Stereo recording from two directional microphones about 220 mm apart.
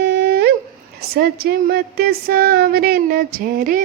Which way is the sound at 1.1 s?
45° right (ahead or behind).